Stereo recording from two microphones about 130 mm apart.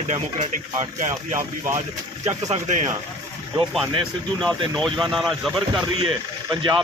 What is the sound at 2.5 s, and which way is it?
Speech, 65° right (ahead or behind).